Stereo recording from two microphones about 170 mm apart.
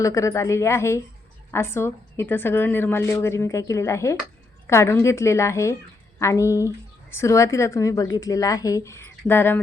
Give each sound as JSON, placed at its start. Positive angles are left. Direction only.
{"t": 0.0, "sound": "a woman's voice", "side_deg": 20}